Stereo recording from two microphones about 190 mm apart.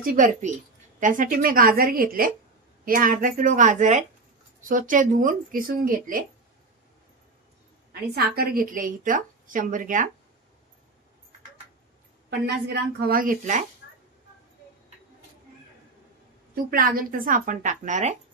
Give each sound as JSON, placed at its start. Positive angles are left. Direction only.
{"t": 0.0, "sound": "speech", "side_deg": -45}
{"t": 7.9, "sound": "a woman's voice", "side_deg": -55}
{"t": 12.3, "sound": "speech", "side_deg": -60}
{"t": 16.5, "sound": "speech", "side_deg": -50}